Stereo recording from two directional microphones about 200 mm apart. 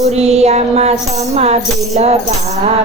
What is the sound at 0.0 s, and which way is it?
Music, 30° right (ahead or behind).